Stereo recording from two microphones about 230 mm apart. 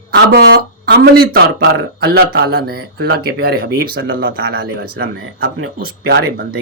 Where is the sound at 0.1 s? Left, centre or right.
Right.